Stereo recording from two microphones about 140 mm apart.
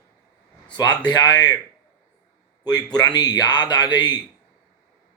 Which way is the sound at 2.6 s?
30° left (ahead or behind).